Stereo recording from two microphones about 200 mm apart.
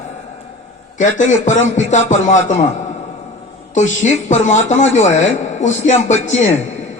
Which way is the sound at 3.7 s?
35° left (ahead or behind).